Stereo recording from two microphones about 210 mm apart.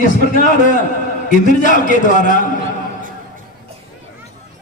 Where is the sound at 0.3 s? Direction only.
40° left (ahead or behind).